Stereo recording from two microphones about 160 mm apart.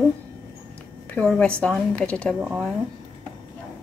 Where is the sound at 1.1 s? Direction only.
5° left (ahead or behind).